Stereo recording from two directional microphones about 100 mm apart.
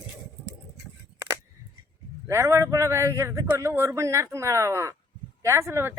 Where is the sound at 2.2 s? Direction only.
25° right (ahead or behind).